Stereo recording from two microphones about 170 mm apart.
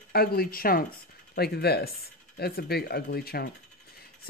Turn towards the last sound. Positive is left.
turn(degrees=65)  # may be behind; listen again after turning